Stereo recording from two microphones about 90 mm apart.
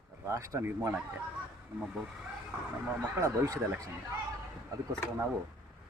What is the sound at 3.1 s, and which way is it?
Speech, 35° right (ahead or behind).